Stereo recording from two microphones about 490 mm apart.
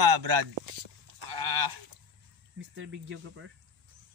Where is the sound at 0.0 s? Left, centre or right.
Right.